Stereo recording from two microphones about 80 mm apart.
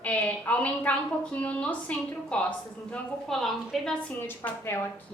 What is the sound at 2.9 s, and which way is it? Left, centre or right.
A woman's voice, centre.